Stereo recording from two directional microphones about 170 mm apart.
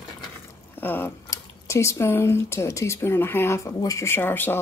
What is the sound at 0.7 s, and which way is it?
Speech, 10° left (ahead or behind).